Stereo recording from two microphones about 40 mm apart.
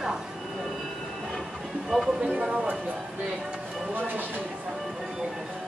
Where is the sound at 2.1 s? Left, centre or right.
Centre.